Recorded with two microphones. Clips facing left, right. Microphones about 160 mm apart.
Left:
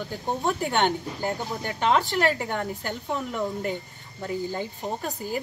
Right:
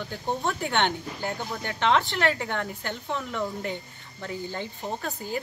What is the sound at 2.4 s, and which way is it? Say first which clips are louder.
Speech: left 2 dB; 10° left (ahead or behind).